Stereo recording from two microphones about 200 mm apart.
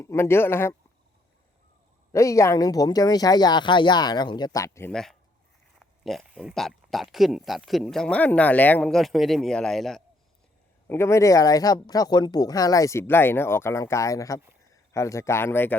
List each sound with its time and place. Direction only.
0.0 s speech: 15° left (ahead or behind)
2.1 s speech: 15° left (ahead or behind)
10.8 s speech: 10° left (ahead or behind)